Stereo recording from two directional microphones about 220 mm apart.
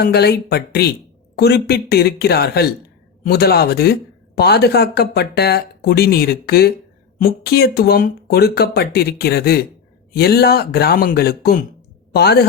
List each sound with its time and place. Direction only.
0.0 s speech: 45° left (ahead or behind)